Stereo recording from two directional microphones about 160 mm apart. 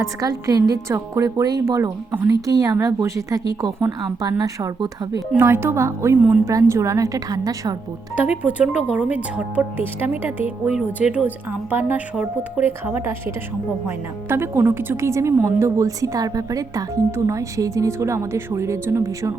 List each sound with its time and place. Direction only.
0.0 s a woman's voice: 20° right (ahead or behind)
8.4 s a woman's voice: 10° right (ahead or behind)